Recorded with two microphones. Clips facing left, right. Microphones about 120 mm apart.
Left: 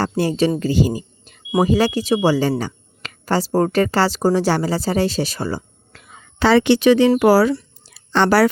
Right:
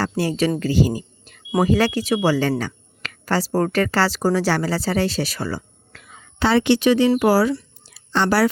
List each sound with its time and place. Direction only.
0.0 s speech: 25° left (ahead or behind)
6.4 s a woman's voice: 90° left
7.2 s speech: 75° left (ahead or behind)
7.9 s a sound: 65° left (ahead or behind)